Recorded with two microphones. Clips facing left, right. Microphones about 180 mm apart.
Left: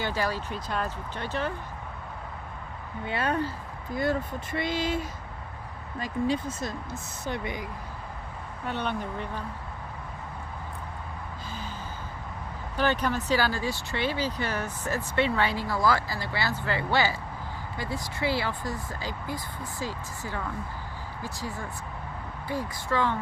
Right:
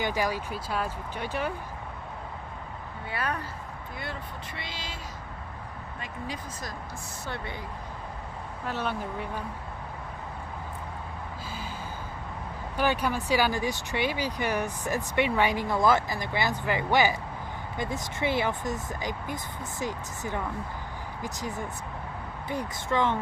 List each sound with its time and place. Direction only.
0.0 s speech: 15° right (ahead or behind)
3.1 s speech: 25° left (ahead or behind)
3.9 s speech: 45° left (ahead or behind)
6.0 s speech: 30° left (ahead or behind)
8.6 s speech: 5° right (ahead or behind)
12.7 s speech: 10° right (ahead or behind)